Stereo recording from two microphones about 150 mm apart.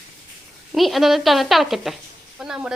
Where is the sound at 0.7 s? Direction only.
Centre (ahead or behind).